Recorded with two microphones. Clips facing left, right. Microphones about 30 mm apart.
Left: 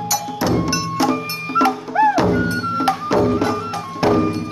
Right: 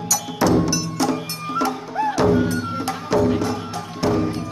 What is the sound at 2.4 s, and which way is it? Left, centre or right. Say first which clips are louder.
Music: left 5 dB; left.